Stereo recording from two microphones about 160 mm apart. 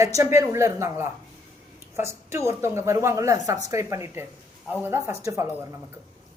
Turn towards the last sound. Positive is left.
turn(degrees=-20)  # may be behind; listen again after turning